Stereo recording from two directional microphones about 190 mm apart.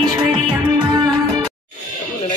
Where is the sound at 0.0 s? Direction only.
20° right (ahead or behind).